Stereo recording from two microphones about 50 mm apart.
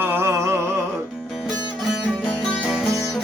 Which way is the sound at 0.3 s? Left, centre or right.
Right.